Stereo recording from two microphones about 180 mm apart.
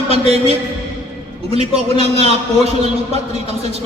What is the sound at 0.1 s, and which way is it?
Speech, 35° right (ahead or behind).